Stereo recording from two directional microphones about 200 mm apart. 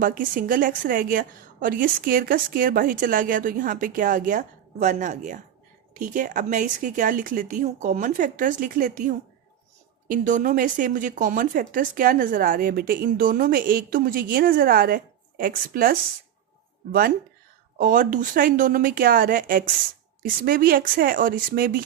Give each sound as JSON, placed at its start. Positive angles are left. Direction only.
{"t": 0.0, "sound": "speech", "side_deg": -40}
{"t": 17.7, "sound": "speech", "side_deg": -40}